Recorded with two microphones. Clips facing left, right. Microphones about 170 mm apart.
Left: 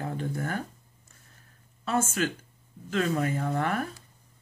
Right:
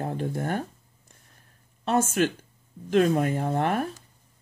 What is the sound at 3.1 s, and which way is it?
Speech, 30° right (ahead or behind).